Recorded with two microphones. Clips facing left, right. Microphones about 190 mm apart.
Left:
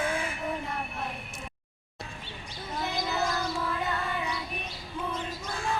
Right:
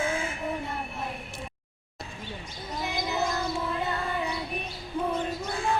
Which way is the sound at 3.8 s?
30° right (ahead or behind).